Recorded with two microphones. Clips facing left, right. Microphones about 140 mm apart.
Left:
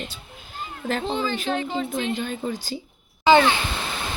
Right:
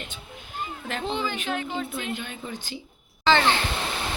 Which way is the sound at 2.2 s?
40° left (ahead or behind).